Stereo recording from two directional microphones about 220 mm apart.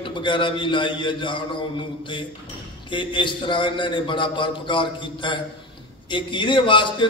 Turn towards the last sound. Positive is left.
turn(degrees=20)  # may be behind; listen again after turning